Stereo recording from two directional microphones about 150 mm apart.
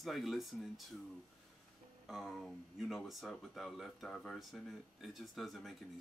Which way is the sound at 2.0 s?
Centre (ahead or behind).